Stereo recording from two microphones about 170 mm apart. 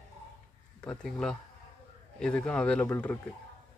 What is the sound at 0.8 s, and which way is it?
Speech, 5° left (ahead or behind).